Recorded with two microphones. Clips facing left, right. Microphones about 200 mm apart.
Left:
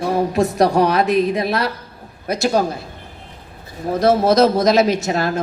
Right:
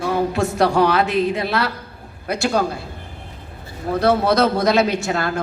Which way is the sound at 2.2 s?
20° left (ahead or behind).